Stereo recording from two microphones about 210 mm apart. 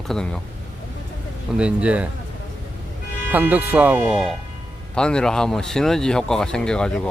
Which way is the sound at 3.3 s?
10° right (ahead or behind).